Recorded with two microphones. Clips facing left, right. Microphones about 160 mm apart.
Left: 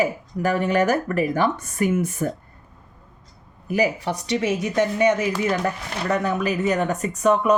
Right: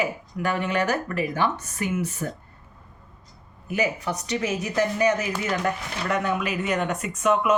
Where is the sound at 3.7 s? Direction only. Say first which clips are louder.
Left 4 dB; 35° left (ahead or behind).